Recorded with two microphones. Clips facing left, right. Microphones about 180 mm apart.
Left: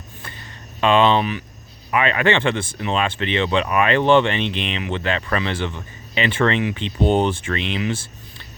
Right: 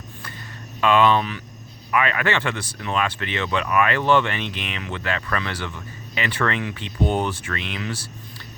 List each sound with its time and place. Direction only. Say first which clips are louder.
0.8 s speech: left 2 dB; 25° left (ahead or behind)